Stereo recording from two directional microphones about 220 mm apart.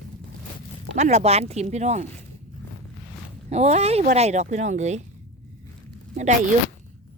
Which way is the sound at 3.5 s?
30° right (ahead or behind).